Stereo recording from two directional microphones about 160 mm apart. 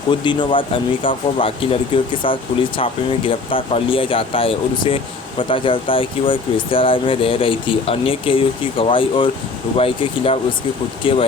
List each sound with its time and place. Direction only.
0.1 s speech: 30° left (ahead or behind)